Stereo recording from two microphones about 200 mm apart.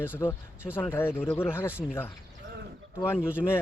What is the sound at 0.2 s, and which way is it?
Speech, 15° left (ahead or behind).